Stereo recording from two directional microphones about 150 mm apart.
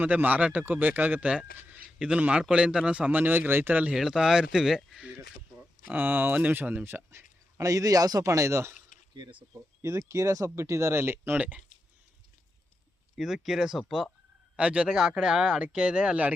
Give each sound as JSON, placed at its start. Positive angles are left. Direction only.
{"t": 0.0, "sound": "speech", "side_deg": -10}
{"t": 9.1, "sound": "speech", "side_deg": -30}
{"t": 9.8, "sound": "speech", "side_deg": -20}
{"t": 13.1, "sound": "speech", "side_deg": 0}